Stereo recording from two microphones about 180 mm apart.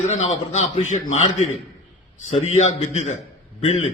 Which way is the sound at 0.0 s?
35° left (ahead or behind).